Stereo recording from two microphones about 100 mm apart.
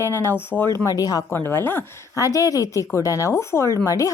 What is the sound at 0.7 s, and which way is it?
Speech, 35° left (ahead or behind).